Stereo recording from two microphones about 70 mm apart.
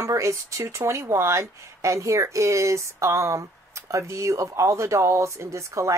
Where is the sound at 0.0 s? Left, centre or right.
Right.